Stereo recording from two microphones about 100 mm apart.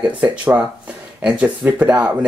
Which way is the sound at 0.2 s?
10° right (ahead or behind).